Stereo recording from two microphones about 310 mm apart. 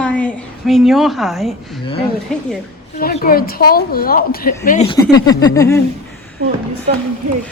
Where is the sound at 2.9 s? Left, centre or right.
Left.